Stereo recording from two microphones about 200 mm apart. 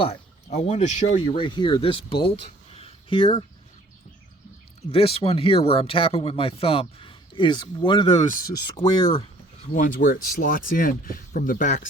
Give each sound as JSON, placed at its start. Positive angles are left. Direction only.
{"t": 0.0, "sound": "speech", "side_deg": 35}
{"t": 2.7, "sound": "a sound", "side_deg": 25}
{"t": 4.9, "sound": "speech", "side_deg": 30}
{"t": 8.2, "sound": "speech", "side_deg": 40}
{"t": 8.6, "sound": "speech", "side_deg": 25}
{"t": 9.7, "sound": "speech", "side_deg": 40}